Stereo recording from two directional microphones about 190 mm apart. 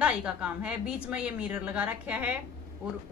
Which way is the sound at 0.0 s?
5° right (ahead or behind).